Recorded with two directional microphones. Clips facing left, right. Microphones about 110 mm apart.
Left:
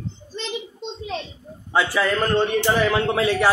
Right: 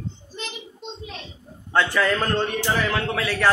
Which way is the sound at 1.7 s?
10° left (ahead or behind).